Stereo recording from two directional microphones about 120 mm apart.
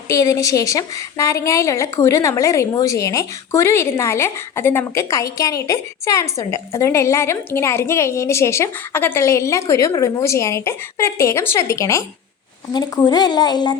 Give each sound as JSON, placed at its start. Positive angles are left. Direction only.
{"t": 0.1, "sound": "a woman's voice", "side_deg": 25}